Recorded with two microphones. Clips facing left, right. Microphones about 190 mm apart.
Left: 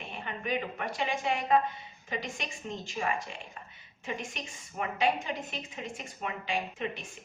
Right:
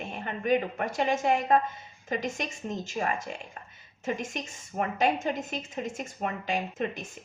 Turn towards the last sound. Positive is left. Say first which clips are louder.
# right 3 dB
turn(degrees=-45)  # may be behind; listen again after turning